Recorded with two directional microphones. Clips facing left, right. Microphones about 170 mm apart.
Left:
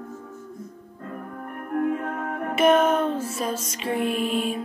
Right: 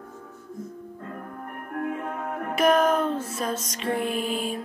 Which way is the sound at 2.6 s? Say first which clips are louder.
Left 2 dB; centre (ahead or behind).